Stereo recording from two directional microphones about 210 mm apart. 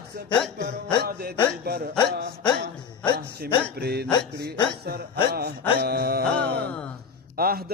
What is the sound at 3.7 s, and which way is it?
Music, 50° right (ahead or behind).